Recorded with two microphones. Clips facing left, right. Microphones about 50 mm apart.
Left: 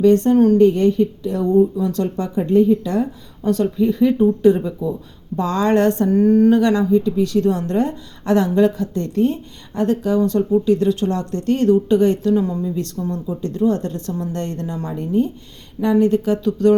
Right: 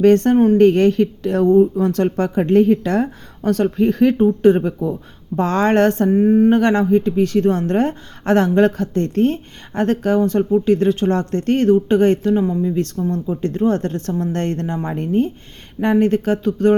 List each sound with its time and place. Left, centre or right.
0.0 s speech: right
0.3 s speech: right
0.6 s a woman's voice: right
1.5 s speech: right
4.4 s a woman's voice: right
6.1 s speech: right
6.5 s a woman's voice: right
13.1 s speech: right
13.4 s a woman's voice: right